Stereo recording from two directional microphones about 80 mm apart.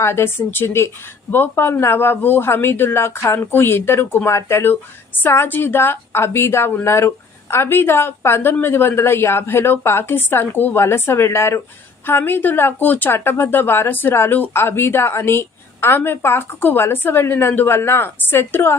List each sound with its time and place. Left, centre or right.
0.0 s a woman's voice: left